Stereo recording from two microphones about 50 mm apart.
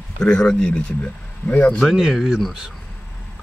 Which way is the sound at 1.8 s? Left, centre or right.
Centre.